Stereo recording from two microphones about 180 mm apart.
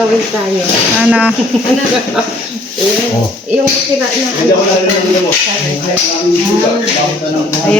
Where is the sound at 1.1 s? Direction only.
5° right (ahead or behind).